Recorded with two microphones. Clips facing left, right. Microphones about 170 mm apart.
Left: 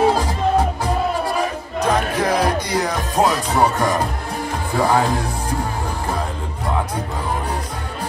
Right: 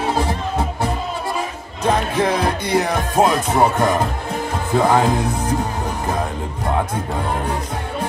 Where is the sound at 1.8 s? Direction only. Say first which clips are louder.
Right 1 dB; 25° right (ahead or behind).